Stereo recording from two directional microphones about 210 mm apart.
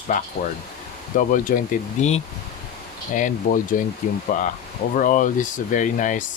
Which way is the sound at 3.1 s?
40° left (ahead or behind).